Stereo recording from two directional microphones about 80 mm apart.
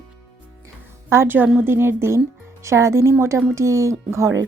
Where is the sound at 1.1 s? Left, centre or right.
Right.